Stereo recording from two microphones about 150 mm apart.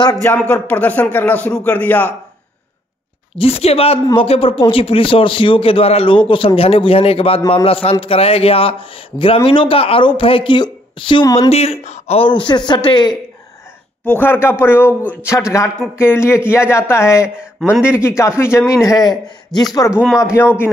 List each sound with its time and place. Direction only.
0.0 s speech: 20° left (ahead or behind)
0.5 s a man's voice: 10° left (ahead or behind)
3.3 s a man's voice: 40° left (ahead or behind)
14.1 s a man's voice: 15° left (ahead or behind)
17.4 s a man's voice: 5° right (ahead or behind)
17.9 s speech: 20° left (ahead or behind)
19.9 s speech: 5° right (ahead or behind)
20.2 s a man's voice: 15° left (ahead or behind)